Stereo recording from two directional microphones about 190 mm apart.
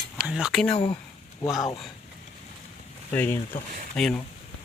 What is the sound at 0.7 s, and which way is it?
Speech, 30° left (ahead or behind).